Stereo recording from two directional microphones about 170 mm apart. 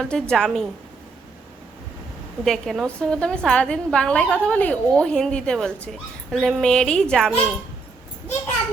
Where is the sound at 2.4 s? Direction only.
Centre (ahead or behind).